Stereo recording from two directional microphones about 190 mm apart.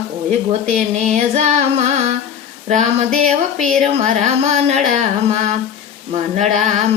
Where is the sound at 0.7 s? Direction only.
40° right (ahead or behind).